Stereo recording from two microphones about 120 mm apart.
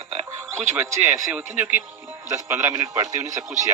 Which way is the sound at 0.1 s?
60° right (ahead or behind).